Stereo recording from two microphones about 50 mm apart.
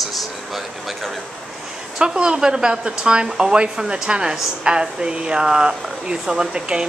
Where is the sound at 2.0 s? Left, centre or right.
Centre.